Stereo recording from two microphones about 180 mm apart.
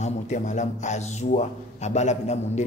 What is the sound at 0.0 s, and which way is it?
A man's voice, 40° left (ahead or behind).